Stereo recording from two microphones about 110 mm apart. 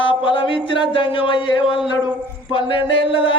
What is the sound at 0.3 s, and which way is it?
Chant, 50° left (ahead or behind).